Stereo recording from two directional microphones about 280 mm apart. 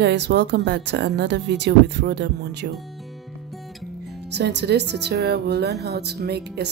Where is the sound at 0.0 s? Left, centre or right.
Right.